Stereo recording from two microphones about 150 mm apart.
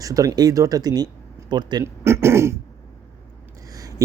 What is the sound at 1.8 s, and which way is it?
Speech, 15° right (ahead or behind).